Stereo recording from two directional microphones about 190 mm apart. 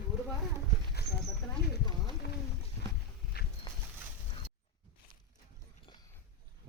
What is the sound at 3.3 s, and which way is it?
Horse, 55° left (ahead or behind).